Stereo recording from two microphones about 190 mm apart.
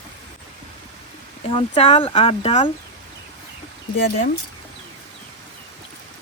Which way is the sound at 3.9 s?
50° left (ahead or behind).